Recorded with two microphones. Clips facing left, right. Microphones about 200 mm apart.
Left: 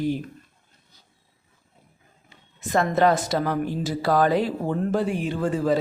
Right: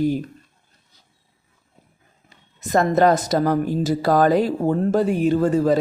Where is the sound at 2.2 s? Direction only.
40° right (ahead or behind).